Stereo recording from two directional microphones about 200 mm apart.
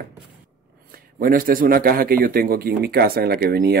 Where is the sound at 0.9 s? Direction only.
45° right (ahead or behind).